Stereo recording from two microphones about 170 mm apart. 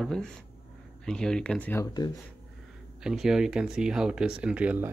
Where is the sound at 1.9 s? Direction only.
25° left (ahead or behind).